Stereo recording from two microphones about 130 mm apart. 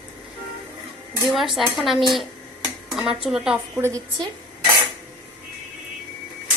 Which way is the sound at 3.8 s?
20° right (ahead or behind).